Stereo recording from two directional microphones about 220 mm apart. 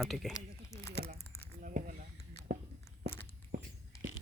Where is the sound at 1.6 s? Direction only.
35° right (ahead or behind).